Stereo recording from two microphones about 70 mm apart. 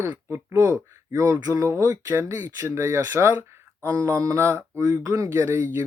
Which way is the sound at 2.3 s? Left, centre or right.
Right.